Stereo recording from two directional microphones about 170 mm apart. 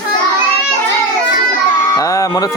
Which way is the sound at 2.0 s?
20° left (ahead or behind).